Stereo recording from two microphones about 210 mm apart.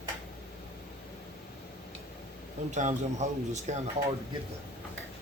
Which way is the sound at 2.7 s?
35° right (ahead or behind).